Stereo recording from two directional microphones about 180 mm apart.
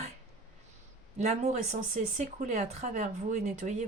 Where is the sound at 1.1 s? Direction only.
40° right (ahead or behind).